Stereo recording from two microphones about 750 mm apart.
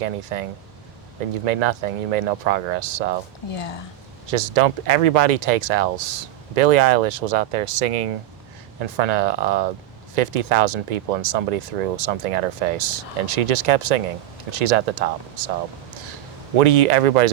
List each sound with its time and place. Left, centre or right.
0.0 s speech: right
1.5 s speech: right
4.3 s speech: right
16.6 s speech: right